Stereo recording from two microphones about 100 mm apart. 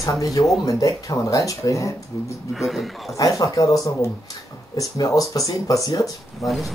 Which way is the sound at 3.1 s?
35° left (ahead or behind).